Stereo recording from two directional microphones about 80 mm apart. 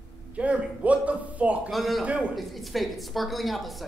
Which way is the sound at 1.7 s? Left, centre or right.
Centre.